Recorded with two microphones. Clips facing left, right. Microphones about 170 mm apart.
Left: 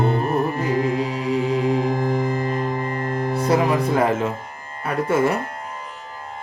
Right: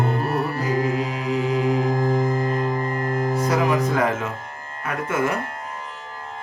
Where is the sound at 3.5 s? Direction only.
30° left (ahead or behind).